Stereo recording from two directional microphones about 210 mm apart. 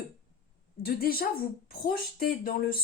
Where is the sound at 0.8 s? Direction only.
45° left (ahead or behind).